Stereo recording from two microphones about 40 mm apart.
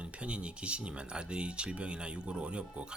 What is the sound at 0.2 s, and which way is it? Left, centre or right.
Speech, right.